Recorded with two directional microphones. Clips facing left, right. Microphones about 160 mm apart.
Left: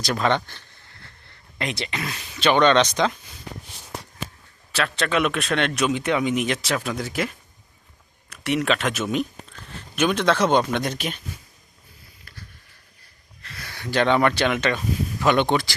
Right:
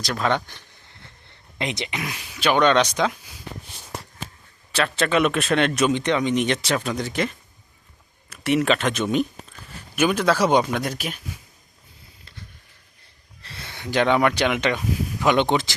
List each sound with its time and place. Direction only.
0.0 s speech: centre (ahead or behind)
4.7 s speech: centre (ahead or behind)
9.9 s speech: 5° right (ahead or behind)
13.4 s speech: 25° right (ahead or behind)